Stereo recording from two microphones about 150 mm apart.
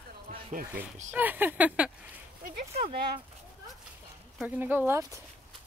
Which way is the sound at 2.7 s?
45° right (ahead or behind).